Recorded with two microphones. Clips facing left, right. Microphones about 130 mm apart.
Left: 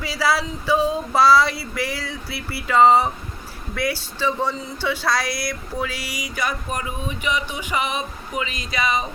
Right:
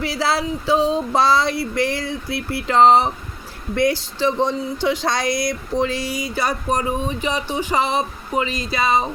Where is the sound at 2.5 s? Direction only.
20° right (ahead or behind).